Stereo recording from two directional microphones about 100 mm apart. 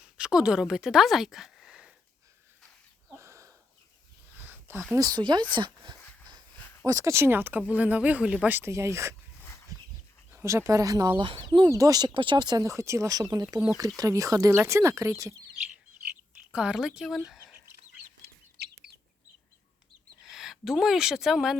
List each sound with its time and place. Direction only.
0.0 s a woman's voice: 10° right (ahead or behind)
3.2 s a sound: 30° right (ahead or behind)
4.9 s speech: 40° right (ahead or behind)
6.8 s speech: 35° right (ahead or behind)
10.3 s speech: 30° right (ahead or behind)
11.2 s speech: 55° right (ahead or behind)
11.7 s speech: 35° right (ahead or behind)
12.1 s speech: 55° right (ahead or behind); by 15.4 s 30° right (ahead or behind)
16.5 s speech: 10° right (ahead or behind)
20.2 s speech: 5° right (ahead or behind)